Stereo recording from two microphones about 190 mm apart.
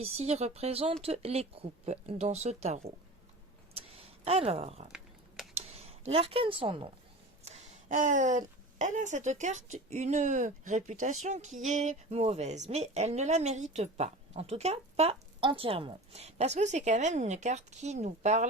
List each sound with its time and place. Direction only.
0.0 s speech: 35° right (ahead or behind)
3.8 s a sound: 30° right (ahead or behind)
5.5 s speech: 30° right (ahead or behind)
7.4 s a woman's voice: 40° right (ahead or behind)